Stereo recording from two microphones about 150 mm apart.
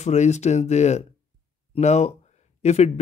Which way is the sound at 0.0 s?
50° left (ahead or behind).